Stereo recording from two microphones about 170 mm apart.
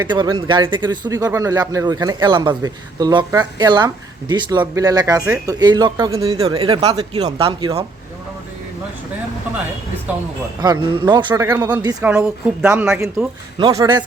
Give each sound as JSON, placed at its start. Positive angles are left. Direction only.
{"t": 0.0, "sound": "speech", "side_deg": -25}
{"t": 10.1, "sound": "speech", "side_deg": -10}
{"t": 10.6, "sound": "speech", "side_deg": -25}
{"t": 12.6, "sound": "speech", "side_deg": -5}
{"t": 13.6, "sound": "speech", "side_deg": -25}